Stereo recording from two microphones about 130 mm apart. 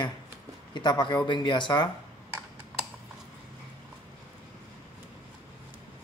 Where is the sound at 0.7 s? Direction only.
35° left (ahead or behind).